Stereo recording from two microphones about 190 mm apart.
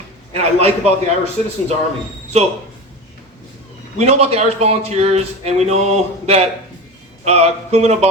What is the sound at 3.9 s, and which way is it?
A man's voice, 35° right (ahead or behind).